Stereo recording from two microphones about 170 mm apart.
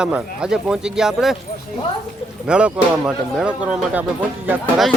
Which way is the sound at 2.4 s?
5° right (ahead or behind).